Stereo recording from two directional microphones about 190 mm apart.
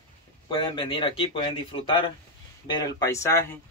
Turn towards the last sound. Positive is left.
turn(degrees=15)  # may be behind; listen again after turning